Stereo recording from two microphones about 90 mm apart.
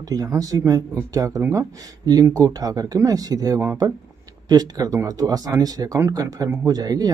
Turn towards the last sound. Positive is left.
turn(degrees=-45)  # may be behind; listen again after turning